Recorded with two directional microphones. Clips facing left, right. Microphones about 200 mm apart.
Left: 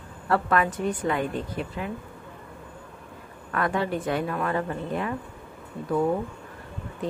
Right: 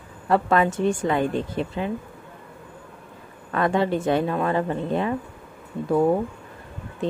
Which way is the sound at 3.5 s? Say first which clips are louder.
Right 5 dB; 25° right (ahead or behind).